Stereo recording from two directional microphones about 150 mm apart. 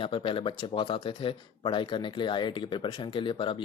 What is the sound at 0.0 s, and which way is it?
Speech, 35° left (ahead or behind).